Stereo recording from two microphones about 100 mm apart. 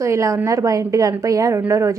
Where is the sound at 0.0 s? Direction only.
30° right (ahead or behind).